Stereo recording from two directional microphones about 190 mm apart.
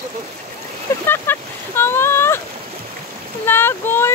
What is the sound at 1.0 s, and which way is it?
Boat, 10° left (ahead or behind).